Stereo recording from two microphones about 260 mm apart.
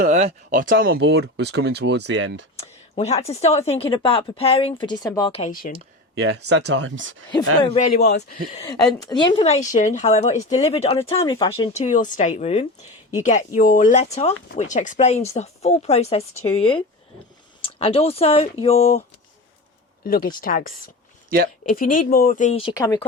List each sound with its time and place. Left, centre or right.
0.0 s speech: right
2.6 s a woman's voice: left
6.1 s speech: right
7.6 s a woman's voice: left
7.9 s speech: left
8.6 s a woman's voice: centre
20.1 s speech: left
21.2 s speech: right
21.7 s a woman's voice: left; by 23.0 s centre